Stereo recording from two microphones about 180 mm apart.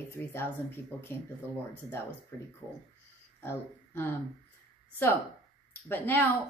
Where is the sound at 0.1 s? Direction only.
15° left (ahead or behind).